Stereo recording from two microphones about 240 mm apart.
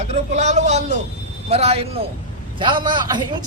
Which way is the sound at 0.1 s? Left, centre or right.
Right.